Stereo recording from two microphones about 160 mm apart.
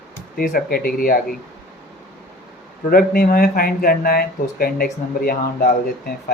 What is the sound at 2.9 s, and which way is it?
Speech, 70° left (ahead or behind).